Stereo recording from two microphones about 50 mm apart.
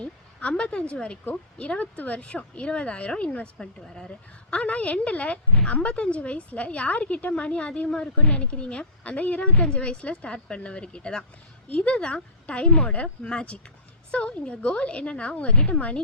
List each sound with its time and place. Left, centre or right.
0.0 s a woman's voice: left
3.6 s speech: centre
4.5 s a woman's voice: left